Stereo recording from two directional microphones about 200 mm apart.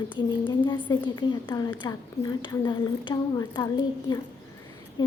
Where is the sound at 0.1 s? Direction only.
25° left (ahead or behind).